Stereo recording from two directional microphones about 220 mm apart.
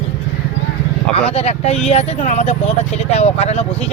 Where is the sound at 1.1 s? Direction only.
25° left (ahead or behind).